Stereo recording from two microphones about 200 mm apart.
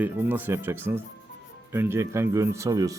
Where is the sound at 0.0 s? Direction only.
10° right (ahead or behind).